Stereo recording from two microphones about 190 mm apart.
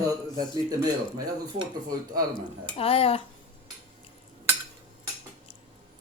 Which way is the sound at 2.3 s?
30° left (ahead or behind).